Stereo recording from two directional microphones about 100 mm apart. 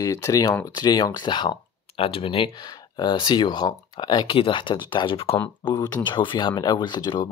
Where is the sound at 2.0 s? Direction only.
70° left (ahead or behind).